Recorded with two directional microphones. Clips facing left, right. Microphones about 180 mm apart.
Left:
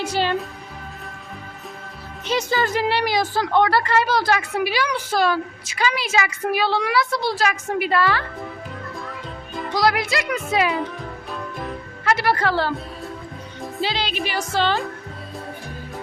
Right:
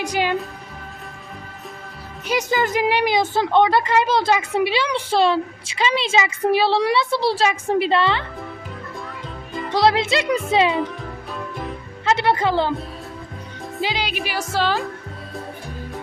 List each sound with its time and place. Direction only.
0.0 s speech: 15° right (ahead or behind)
2.2 s a woman's voice: 15° right (ahead or behind)
9.7 s a woman's voice: 25° right (ahead or behind)
12.0 s music: 20° right (ahead or behind)
13.8 s speech: 15° right (ahead or behind)